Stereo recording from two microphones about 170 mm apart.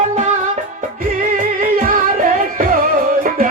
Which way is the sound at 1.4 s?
50° right (ahead or behind).